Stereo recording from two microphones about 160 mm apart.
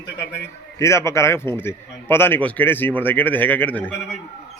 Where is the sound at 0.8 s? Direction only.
15° left (ahead or behind).